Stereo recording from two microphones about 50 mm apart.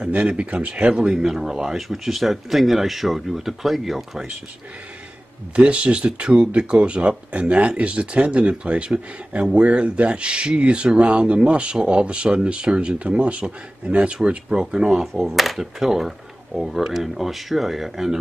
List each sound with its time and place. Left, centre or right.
0.1 s speech: right
1.1 s speech: centre
5.6 s speech: right
15.2 s speech: centre